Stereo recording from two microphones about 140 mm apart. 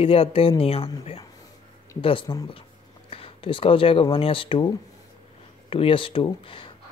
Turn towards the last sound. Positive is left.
turn(degrees=40)  # may be behind; listen again after turning